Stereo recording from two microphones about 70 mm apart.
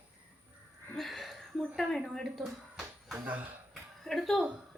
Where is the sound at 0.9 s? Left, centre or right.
Centre.